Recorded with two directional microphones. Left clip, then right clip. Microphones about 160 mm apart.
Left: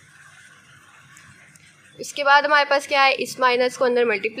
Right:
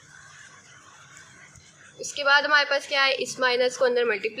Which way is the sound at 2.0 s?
25° left (ahead or behind).